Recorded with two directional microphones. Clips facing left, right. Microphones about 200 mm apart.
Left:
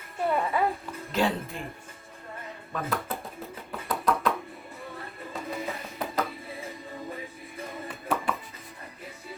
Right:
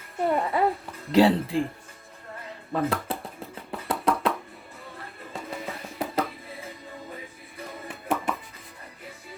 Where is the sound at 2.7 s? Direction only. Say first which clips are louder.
Right 6 dB; 30° right (ahead or behind).